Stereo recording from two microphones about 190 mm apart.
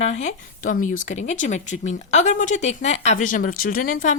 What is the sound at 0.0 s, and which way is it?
A woman's voice, 35° left (ahead or behind).